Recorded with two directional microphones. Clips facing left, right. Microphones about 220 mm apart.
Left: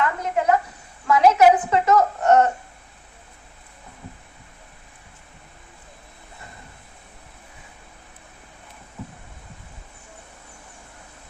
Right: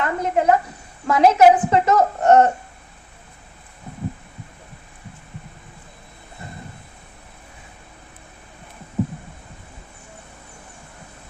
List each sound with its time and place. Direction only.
0.0 s a woman's voice: 30° right (ahead or behind)